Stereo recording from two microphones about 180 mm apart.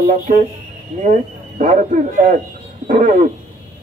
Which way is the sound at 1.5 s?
45° right (ahead or behind).